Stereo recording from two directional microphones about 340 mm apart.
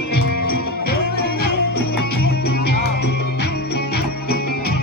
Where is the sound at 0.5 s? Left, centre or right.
Left.